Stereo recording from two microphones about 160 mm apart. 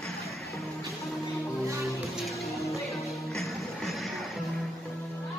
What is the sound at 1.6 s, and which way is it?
Music, 20° right (ahead or behind).